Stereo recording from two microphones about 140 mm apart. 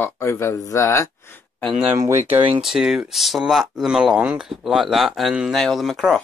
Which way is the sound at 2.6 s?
Centre (ahead or behind).